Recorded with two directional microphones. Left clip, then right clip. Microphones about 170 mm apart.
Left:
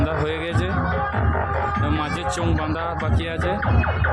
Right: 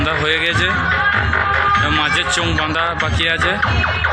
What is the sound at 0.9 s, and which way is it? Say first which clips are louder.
Music: right 9 dB; 50° left (ahead or behind).